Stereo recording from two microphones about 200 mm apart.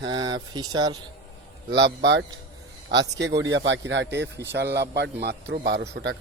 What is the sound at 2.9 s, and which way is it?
Speech, 60° right (ahead or behind).